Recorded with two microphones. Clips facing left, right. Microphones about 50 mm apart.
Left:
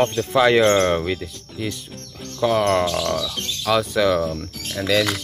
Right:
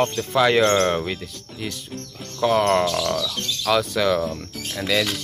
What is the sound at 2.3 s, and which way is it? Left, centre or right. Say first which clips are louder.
Speech: even; centre.